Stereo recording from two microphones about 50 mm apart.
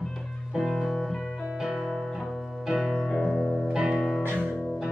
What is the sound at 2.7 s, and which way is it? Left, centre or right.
Music, centre.